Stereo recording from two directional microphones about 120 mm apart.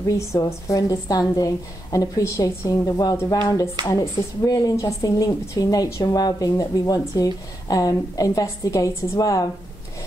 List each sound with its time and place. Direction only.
0.0 s a woman's voice: 25° left (ahead or behind)